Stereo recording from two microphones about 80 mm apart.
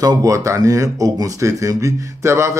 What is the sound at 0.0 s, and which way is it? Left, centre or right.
Speech, right.